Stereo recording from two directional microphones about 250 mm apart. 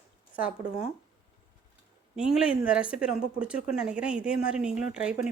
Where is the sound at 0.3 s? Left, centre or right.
Centre.